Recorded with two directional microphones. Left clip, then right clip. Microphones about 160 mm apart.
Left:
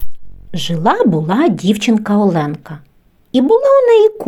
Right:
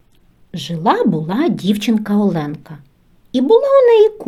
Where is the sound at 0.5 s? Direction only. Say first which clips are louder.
Left 2 dB; 30° left (ahead or behind).